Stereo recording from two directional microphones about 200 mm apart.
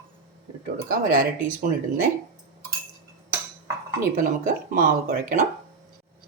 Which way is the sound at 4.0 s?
45° right (ahead or behind).